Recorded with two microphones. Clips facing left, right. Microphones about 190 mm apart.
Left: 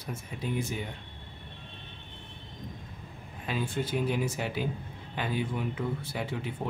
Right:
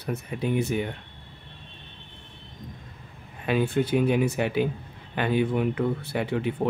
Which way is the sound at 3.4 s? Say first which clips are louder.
Right 8 dB; 65° right (ahead or behind).